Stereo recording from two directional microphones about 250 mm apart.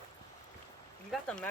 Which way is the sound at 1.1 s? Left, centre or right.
Centre.